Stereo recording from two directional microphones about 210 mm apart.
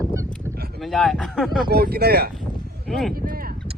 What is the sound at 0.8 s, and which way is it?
Speech, centre (ahead or behind).